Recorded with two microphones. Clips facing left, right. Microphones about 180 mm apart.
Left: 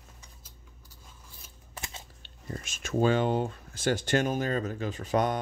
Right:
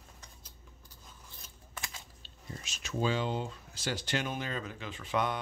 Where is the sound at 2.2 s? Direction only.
55° left (ahead or behind).